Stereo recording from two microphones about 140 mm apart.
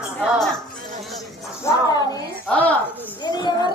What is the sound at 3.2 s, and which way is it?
Speech, 30° left (ahead or behind).